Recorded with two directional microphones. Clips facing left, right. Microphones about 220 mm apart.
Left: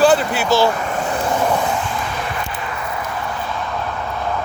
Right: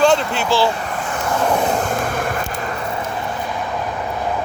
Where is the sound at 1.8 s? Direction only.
50° right (ahead or behind).